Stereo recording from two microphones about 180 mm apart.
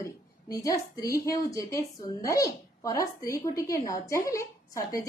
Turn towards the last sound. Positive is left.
turn(degrees=20)  # may be behind; listen again after turning